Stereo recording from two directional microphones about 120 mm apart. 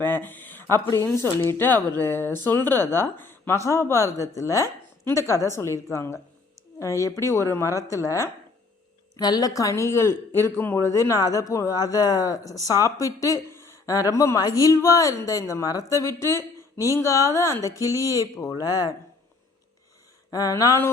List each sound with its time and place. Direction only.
0.0 s a woman's voice: 15° left (ahead or behind); by 18.9 s 30° left (ahead or behind)
20.3 s a woman's voice: 30° left (ahead or behind)